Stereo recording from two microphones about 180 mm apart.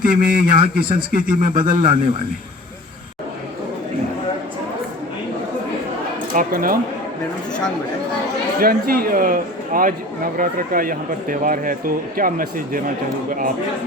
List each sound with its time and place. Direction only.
0.1 s speech: 50° right (ahead or behind)
6.3 s speech: 50° right (ahead or behind)
8.5 s speech: 55° right (ahead or behind)